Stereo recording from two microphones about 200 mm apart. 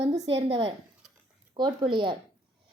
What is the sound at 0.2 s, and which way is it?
A woman's voice, 25° right (ahead or behind).